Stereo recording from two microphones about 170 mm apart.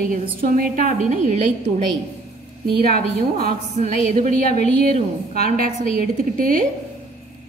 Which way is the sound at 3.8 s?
50° right (ahead or behind).